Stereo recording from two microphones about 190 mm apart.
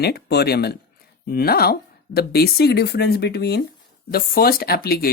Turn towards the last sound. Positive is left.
turn(degrees=55)  # may be behind; listen again after turning